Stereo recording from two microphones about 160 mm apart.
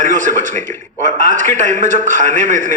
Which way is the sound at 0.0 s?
55° right (ahead or behind).